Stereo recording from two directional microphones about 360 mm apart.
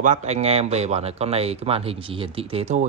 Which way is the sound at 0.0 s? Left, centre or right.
Centre.